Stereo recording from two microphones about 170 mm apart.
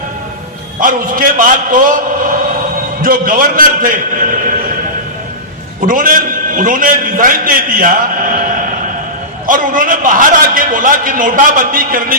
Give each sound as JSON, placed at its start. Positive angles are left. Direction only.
{"t": 0.8, "sound": "a man's voice", "side_deg": -55}
{"t": 5.8, "sound": "a man's voice", "side_deg": -55}